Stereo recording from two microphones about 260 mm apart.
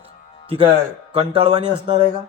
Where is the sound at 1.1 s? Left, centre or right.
Right.